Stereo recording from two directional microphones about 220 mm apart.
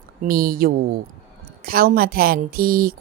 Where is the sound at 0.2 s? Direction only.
40° right (ahead or behind).